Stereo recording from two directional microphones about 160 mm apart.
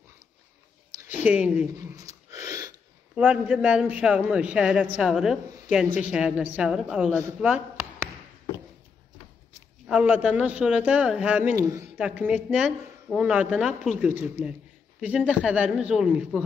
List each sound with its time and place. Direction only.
1.0 s speech: 10° right (ahead or behind)
1.8 s a sound: 20° right (ahead or behind)
3.2 s a woman's voice: 5° right (ahead or behind)
9.8 s a woman's voice: 5° right (ahead or behind)
11.5 s a woman's voice: 20° right (ahead or behind)